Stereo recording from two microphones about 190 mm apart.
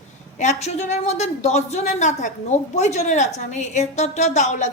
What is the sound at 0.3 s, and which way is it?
A woman's voice, 40° left (ahead or behind).